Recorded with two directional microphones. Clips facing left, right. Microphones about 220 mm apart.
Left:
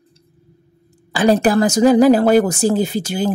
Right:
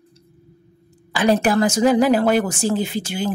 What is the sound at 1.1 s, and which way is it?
Speech, 35° left (ahead or behind).